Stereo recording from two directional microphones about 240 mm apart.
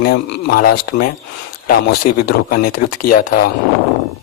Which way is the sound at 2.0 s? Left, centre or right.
Left.